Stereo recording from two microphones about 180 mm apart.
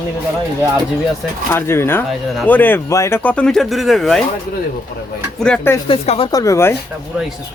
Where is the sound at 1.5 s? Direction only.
15° left (ahead or behind).